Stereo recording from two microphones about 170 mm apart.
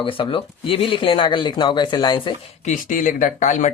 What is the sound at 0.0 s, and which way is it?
Speech, 30° left (ahead or behind).